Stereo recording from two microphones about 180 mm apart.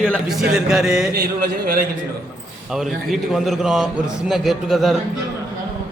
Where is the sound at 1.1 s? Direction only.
55° right (ahead or behind).